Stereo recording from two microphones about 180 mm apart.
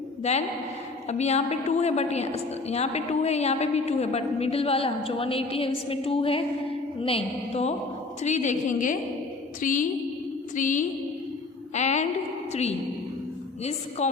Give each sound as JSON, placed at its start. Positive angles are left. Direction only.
{"t": 0.2, "sound": "a woman's voice", "side_deg": 40}
{"t": 9.6, "sound": "a sound", "side_deg": 45}
{"t": 11.7, "sound": "a woman's voice", "side_deg": 40}
{"t": 14.0, "sound": "speech", "side_deg": 40}